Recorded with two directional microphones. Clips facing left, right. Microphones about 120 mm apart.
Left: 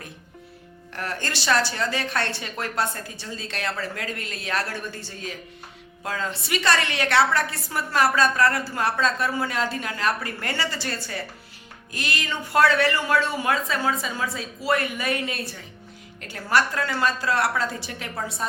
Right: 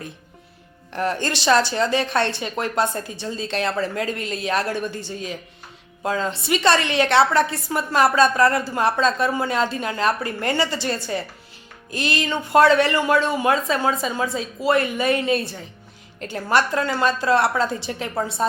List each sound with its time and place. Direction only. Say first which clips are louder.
0.9 s a woman's voice: right 7 dB; 20° right (ahead or behind)